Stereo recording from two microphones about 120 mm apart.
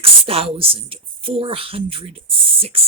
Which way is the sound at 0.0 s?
55° right (ahead or behind).